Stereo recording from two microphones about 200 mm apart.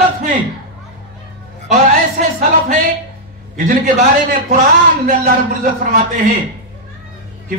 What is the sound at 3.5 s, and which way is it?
A man's voice, 45° right (ahead or behind).